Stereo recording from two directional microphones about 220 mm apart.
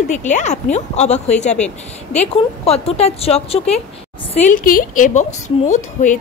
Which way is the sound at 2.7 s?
30° left (ahead or behind).